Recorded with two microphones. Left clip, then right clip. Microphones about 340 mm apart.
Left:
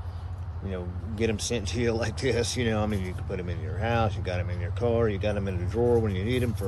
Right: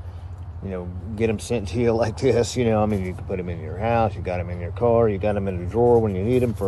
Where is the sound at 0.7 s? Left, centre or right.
Centre.